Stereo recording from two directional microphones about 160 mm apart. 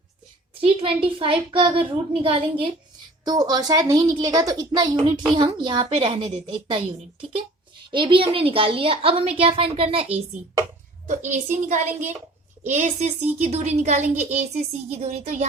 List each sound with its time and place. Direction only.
0.6 s a woman's voice: 35° right (ahead or behind)
7.9 s a woman's voice: 30° right (ahead or behind)
11.0 s a woman's voice: 50° right (ahead or behind)